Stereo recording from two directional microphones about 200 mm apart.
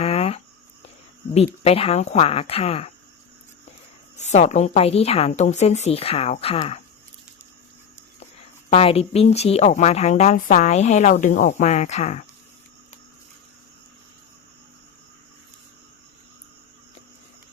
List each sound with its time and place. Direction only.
0.0 s a sound: 30° left (ahead or behind)
1.6 s speech: 30° left (ahead or behind)
4.2 s speech: 35° left (ahead or behind)
8.7 s speech: 30° left (ahead or behind)